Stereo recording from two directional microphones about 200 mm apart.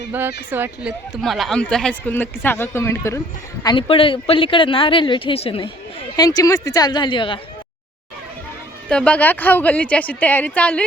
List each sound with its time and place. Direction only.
0.1 s a woman's voice: 10° right (ahead or behind); by 7.3 s 25° left (ahead or behind)
8.9 s a woman's voice: 5° left (ahead or behind)